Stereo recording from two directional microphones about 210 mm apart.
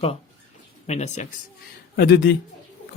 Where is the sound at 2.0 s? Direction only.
50° left (ahead or behind).